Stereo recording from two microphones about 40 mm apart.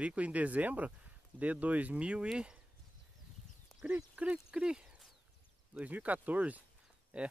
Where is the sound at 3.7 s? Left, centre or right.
Centre.